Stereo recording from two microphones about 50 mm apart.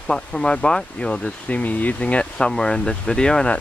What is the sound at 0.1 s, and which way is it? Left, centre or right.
Speech, centre.